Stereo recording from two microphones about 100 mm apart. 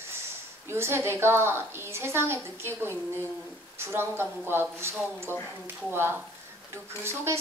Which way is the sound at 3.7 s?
25° right (ahead or behind).